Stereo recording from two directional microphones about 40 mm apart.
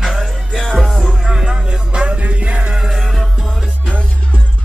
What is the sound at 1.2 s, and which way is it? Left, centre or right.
Music, centre.